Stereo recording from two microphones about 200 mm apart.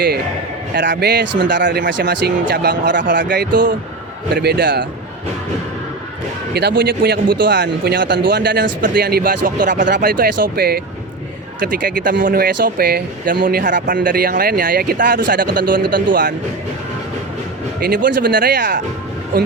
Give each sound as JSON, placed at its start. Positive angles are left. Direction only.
{"t": 0.8, "sound": "speech", "side_deg": -60}
{"t": 6.5, "sound": "a man's voice", "side_deg": -55}
{"t": 17.7, "sound": "a man's voice", "side_deg": -45}